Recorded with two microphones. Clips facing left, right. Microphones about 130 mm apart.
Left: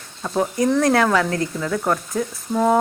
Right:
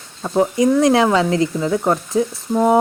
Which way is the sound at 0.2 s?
15° right (ahead or behind).